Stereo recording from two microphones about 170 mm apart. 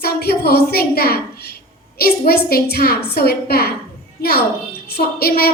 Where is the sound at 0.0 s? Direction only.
65° left (ahead or behind).